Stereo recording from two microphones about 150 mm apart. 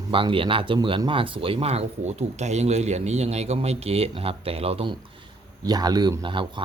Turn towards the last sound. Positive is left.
turn(degrees=-35)  # may be behind; listen again after turning